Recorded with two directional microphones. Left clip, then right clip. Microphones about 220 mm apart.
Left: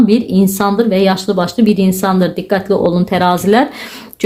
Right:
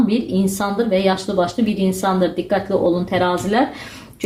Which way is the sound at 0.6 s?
40° left (ahead or behind).